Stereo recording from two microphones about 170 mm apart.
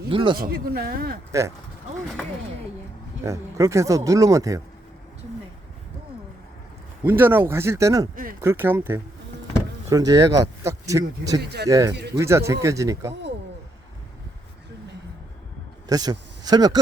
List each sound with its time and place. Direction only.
0.1 s speech: 30° right (ahead or behind)
0.3 s speech: 60° right (ahead or behind)
1.3 s speech: 20° right (ahead or behind)
3.2 s speech: 20° right (ahead or behind)
7.0 s speech: 10° right (ahead or behind)
8.1 s speech: 55° right (ahead or behind)
8.4 s speech: 15° right (ahead or behind)
11.3 s speech: 75° right (ahead or behind)
11.7 s speech: 20° right (ahead or behind)
15.9 s speech: 25° right (ahead or behind)